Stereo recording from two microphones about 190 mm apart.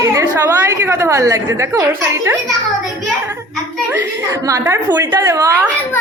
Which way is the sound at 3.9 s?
15° right (ahead or behind).